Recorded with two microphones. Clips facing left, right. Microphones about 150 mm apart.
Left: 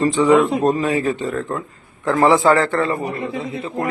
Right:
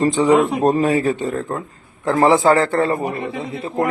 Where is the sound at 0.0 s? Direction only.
35° right (ahead or behind).